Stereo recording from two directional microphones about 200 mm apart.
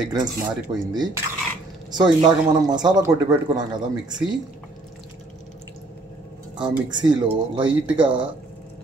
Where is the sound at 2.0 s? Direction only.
20° right (ahead or behind).